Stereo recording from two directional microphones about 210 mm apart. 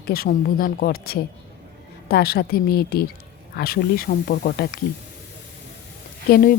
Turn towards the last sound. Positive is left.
turn(degrees=45)  # may be behind; listen again after turning